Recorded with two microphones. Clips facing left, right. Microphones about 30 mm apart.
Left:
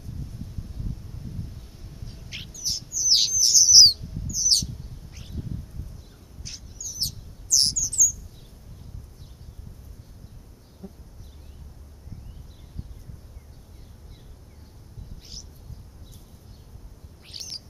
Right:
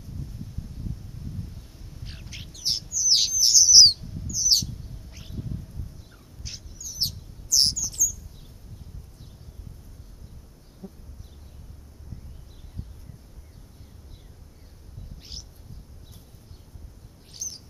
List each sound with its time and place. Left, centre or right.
2.2 s bird: centre
2.5 s bird: right
2.9 s bird: centre
6.4 s bird: centre
7.0 s chirp: right
7.6 s bird: centre
17.3 s bird: left